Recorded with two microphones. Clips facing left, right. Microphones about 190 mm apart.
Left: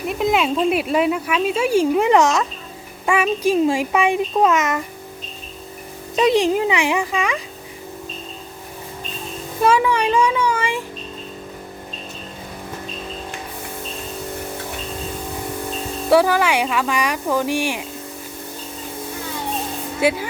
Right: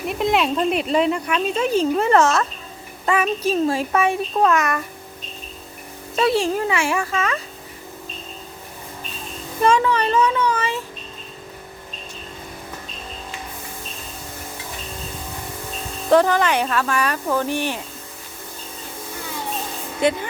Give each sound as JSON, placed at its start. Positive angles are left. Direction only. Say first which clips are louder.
{"t": 0.1, "sound": "speech", "louder": "left 1 dB", "side_deg": 0}
{"t": 6.1, "sound": "speech", "louder": "left 3 dB", "side_deg": 15}
{"t": 9.6, "sound": "speech", "louder": "left 1 dB", "side_deg": 10}
{"t": 16.0, "sound": "speech", "louder": "even", "side_deg": 10}
{"t": 20.0, "sound": "speech", "louder": "left 1 dB", "side_deg": 5}